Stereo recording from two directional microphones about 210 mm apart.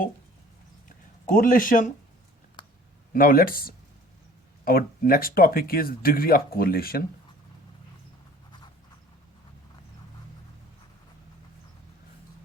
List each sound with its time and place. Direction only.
1.3 s speech: 40° left (ahead or behind)
3.1 s speech: 40° left (ahead or behind)